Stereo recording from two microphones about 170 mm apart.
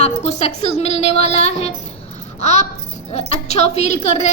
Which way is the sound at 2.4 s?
40° left (ahead or behind).